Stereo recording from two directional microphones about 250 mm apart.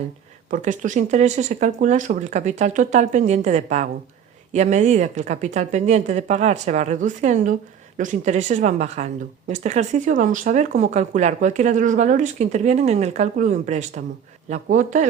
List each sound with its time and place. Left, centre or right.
0.5 s speech: right